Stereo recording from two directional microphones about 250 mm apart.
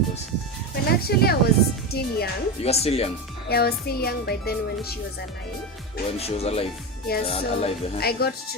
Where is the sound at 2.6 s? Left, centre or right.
Left.